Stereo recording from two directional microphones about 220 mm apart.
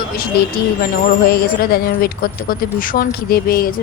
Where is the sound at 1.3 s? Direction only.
45° left (ahead or behind).